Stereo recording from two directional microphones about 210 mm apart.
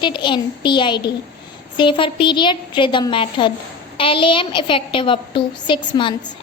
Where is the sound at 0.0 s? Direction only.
20° left (ahead or behind).